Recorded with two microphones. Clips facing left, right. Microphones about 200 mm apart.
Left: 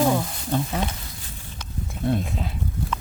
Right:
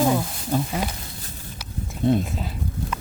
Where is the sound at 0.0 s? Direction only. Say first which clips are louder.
Even; 5° right (ahead or behind).